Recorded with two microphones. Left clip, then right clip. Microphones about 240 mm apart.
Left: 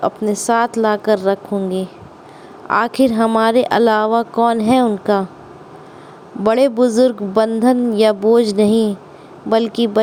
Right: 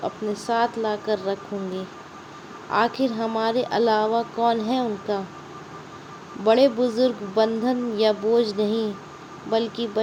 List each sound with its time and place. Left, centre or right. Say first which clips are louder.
0.0 s a woman's voice: left 9 dB; left
6.4 s a woman's voice: left 5 dB; left